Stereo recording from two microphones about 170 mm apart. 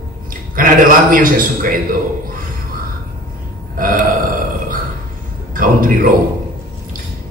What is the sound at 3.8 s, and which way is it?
Speech, 55° right (ahead or behind).